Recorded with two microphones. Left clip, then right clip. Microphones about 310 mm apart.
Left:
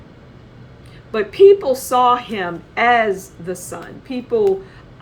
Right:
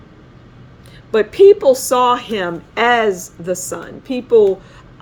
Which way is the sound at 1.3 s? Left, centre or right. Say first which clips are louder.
Right 2 dB; right.